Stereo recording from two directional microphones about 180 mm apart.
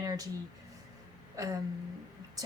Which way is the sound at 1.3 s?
20° right (ahead or behind).